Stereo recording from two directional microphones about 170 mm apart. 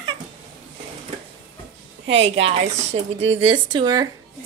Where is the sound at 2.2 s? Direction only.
35° right (ahead or behind).